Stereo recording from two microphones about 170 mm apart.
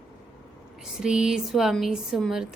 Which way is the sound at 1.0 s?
5° right (ahead or behind).